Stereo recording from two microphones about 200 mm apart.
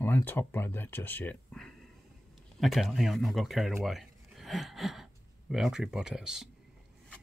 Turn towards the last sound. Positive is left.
turn(degrees=-5)  # may be behind; listen again after turning